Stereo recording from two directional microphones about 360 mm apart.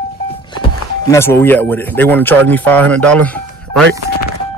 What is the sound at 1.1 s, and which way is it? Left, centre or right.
Speech, centre.